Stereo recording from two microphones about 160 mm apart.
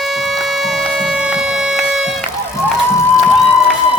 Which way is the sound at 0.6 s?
Centre (ahead or behind).